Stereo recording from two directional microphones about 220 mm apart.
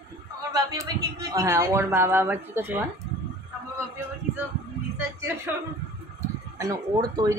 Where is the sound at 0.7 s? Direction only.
15° right (ahead or behind).